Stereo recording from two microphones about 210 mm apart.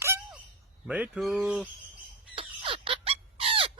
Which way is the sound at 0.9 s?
5° right (ahead or behind).